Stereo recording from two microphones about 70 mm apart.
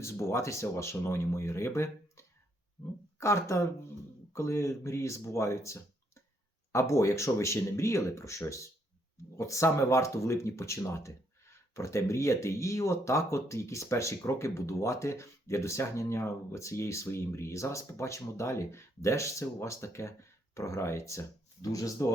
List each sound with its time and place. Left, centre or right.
0.0 s speech: left